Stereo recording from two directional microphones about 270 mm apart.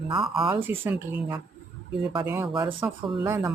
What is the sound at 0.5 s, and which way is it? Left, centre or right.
Speech, centre.